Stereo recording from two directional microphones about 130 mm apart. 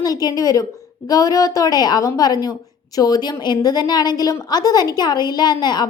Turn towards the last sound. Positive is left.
turn(degrees=35)  # may be behind; listen again after turning